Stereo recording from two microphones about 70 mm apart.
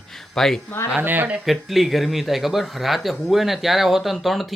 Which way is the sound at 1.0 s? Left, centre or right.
Right.